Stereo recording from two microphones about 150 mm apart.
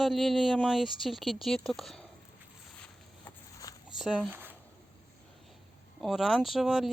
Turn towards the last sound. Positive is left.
turn(degrees=0)  # may be behind; listen again after turning